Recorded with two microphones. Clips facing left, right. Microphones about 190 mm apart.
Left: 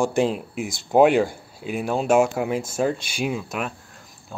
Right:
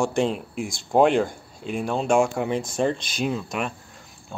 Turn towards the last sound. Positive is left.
turn(degrees=5)  # may be behind; listen again after turning